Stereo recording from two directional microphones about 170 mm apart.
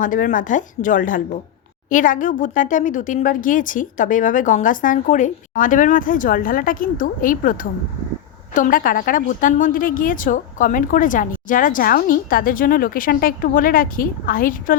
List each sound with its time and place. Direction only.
0.0 s a woman's voice: 50° left (ahead or behind)